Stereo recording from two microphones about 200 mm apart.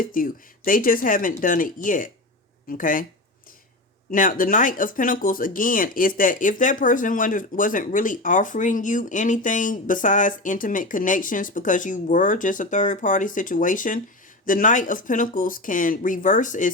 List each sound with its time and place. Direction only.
0.0 s speech: 45° left (ahead or behind)
4.1 s speech: 45° left (ahead or behind)